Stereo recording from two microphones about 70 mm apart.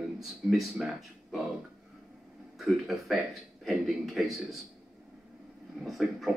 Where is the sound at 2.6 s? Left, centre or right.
Centre.